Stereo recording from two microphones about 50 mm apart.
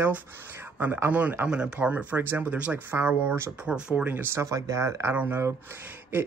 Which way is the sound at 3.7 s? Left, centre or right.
Centre.